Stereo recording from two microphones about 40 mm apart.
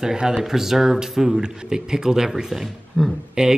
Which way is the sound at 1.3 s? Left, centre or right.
Centre.